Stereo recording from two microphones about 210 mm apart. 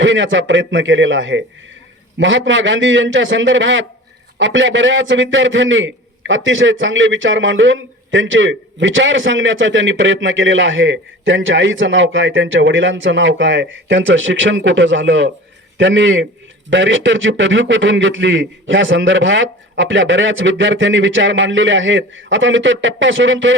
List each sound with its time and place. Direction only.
0.0 s a man's voice: 65° right (ahead or behind)